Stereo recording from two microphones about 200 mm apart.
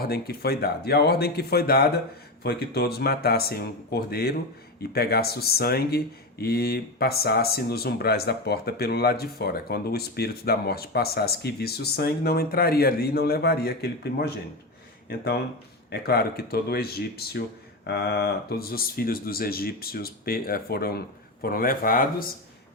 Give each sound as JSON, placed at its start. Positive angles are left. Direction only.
{"t": 0.0, "sound": "speech", "side_deg": 50}